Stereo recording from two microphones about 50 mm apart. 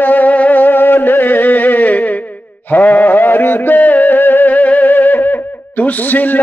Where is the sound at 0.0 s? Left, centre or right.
Left.